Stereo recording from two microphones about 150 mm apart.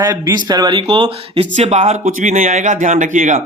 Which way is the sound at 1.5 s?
45° right (ahead or behind).